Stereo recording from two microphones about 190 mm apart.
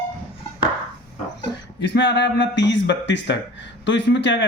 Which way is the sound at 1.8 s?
70° left (ahead or behind).